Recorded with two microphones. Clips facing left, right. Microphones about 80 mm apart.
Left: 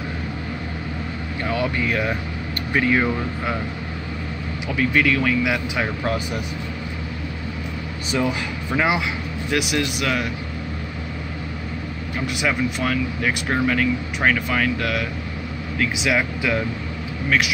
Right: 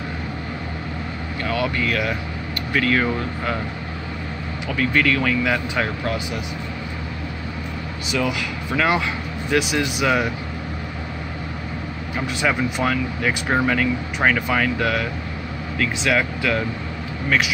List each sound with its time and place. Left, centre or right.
1.4 s speech: centre
4.6 s speech: centre
8.1 s speech: left
8.7 s speech: centre
9.5 s speech: centre
12.3 s speech: centre
15.8 s speech: centre